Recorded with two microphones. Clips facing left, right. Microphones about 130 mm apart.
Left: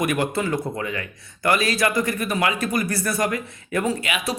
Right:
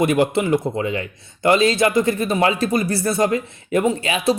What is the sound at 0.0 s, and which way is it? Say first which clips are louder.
Speech: right 5 dB; 25° right (ahead or behind).